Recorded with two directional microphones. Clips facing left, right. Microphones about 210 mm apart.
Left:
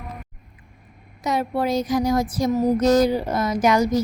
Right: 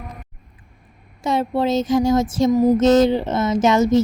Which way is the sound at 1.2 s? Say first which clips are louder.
Right 3 dB; 25° right (ahead or behind).